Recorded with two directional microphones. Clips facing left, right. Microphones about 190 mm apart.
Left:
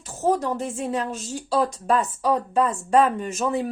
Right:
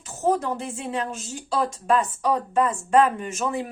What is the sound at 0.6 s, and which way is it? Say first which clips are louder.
Speech: left 3 dB; 40° left (ahead or behind).